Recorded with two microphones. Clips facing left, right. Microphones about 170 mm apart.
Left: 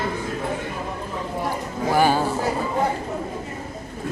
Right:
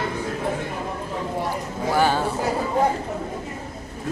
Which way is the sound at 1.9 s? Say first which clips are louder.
Left 2 dB; 10° left (ahead or behind).